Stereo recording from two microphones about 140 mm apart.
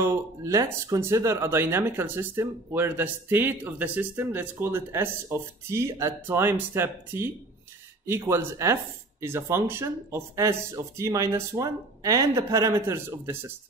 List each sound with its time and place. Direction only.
0.0 s speech: 20° right (ahead or behind)